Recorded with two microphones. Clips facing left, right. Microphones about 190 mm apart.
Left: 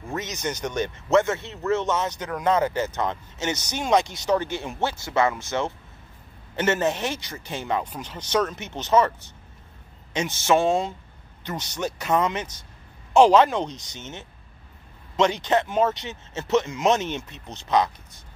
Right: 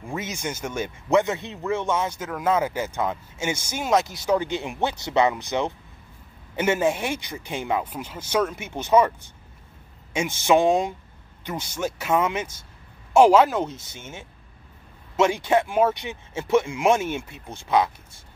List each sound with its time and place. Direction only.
0.0 s speech: 10° right (ahead or behind)
4.4 s speech: 15° right (ahead or behind)
10.4 s speech: 15° right (ahead or behind)